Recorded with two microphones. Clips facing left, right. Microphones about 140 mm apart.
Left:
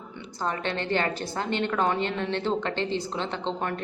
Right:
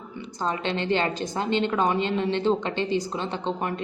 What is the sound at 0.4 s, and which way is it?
A woman's voice, 20° right (ahead or behind).